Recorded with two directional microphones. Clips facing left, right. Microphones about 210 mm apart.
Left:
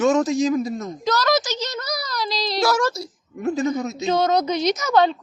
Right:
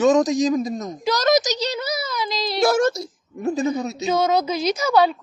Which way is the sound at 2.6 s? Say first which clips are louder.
Right 4 dB; 55° right (ahead or behind).